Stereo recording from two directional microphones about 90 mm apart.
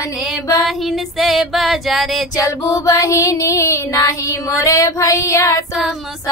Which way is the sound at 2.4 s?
40° left (ahead or behind).